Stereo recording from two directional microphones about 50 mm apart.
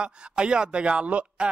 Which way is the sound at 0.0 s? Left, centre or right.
Centre.